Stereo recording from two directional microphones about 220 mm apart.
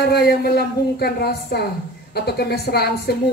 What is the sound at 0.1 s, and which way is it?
Speech, 45° left (ahead or behind).